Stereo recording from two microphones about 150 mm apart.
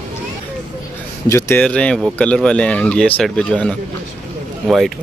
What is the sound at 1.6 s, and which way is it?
Speech, 5° left (ahead or behind).